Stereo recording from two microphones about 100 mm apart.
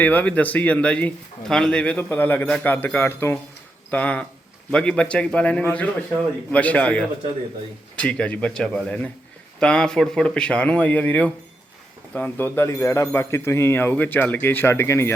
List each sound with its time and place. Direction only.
0.0 s a man's voice: 15° left (ahead or behind)
3.9 s a man's voice: 15° left (ahead or behind)